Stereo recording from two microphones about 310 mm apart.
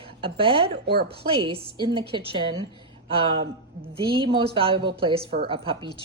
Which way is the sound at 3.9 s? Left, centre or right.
Centre.